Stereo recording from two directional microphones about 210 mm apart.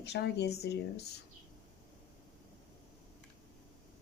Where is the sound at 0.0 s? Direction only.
50° left (ahead or behind).